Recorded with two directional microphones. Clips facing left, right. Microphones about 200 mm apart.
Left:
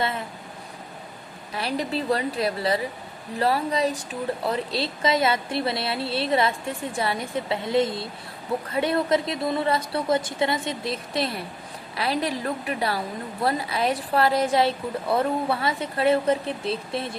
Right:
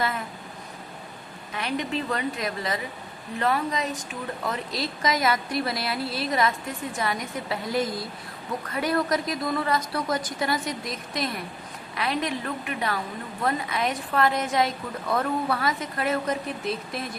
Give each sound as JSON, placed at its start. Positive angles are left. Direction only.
{"t": 1.5, "sound": "speech", "side_deg": 35}